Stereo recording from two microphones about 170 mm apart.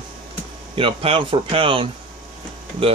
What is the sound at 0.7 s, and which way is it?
Speech, 30° right (ahead or behind).